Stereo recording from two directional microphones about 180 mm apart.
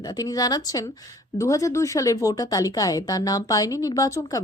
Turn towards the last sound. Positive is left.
turn(degrees=20)  # may be behind; listen again after turning